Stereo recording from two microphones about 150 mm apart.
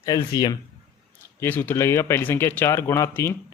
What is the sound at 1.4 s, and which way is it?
Speech, 15° left (ahead or behind).